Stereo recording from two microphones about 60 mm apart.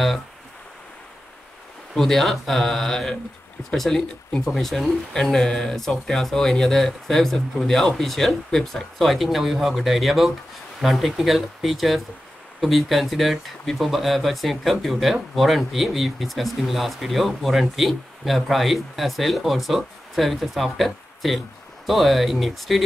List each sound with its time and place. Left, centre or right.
2.0 s speech: centre